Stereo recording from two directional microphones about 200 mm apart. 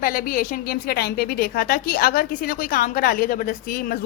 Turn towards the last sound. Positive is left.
turn(degrees=50)  # may be behind; listen again after turning